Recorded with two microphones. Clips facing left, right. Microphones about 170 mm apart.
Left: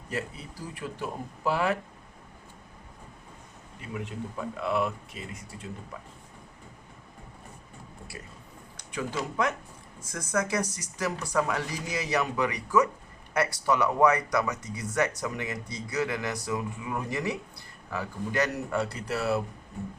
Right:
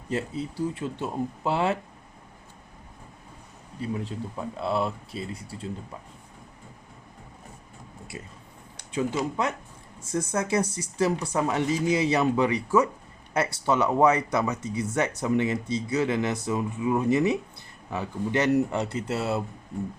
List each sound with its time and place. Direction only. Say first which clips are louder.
0.1 s speech: right 6 dB; 25° right (ahead or behind)
3.8 s speech: right 5 dB; 35° right (ahead or behind)
8.9 s speech: right 6 dB; 25° right (ahead or behind)